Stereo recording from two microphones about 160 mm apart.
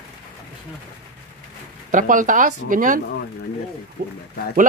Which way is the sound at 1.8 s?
55° right (ahead or behind).